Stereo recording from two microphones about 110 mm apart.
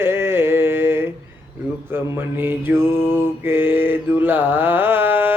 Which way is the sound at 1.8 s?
20° right (ahead or behind).